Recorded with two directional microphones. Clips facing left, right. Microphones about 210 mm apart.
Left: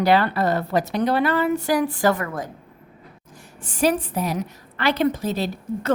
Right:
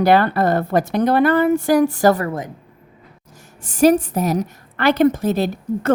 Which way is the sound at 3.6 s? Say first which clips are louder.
Right 7 dB; 40° right (ahead or behind).